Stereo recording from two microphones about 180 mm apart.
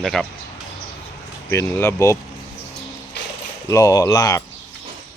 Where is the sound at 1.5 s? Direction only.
15° left (ahead or behind).